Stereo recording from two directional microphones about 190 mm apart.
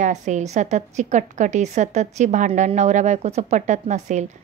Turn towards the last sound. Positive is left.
turn(degrees=-35)  # may be behind; listen again after turning